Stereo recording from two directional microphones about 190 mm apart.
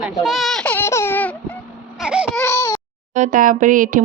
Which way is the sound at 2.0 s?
5° right (ahead or behind).